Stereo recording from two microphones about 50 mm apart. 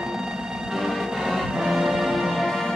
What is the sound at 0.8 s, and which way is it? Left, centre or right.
Music, centre.